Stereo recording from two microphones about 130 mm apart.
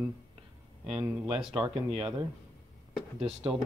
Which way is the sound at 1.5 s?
40° right (ahead or behind).